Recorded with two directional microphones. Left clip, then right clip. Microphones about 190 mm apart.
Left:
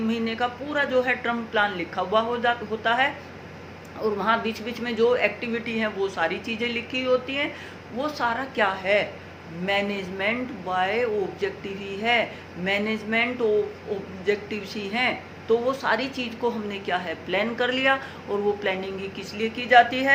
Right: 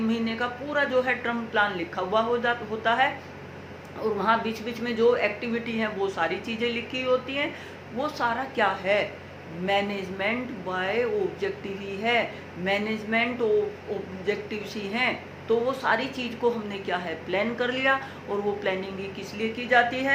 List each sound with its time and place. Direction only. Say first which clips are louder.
0.1 s a woman's voice: left 2 dB; 15° left (ahead or behind)